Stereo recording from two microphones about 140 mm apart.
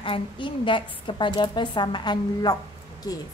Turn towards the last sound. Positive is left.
turn(degrees=30)  # may be behind; listen again after turning